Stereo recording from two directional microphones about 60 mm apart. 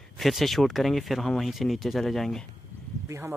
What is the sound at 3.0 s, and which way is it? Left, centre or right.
Speech, right.